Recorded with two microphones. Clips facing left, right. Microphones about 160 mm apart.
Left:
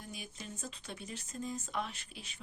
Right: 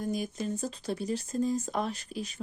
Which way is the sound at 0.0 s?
40° right (ahead or behind).